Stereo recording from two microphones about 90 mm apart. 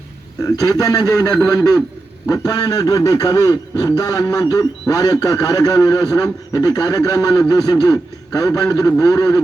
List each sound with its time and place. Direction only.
0.4 s a man's voice: 45° left (ahead or behind)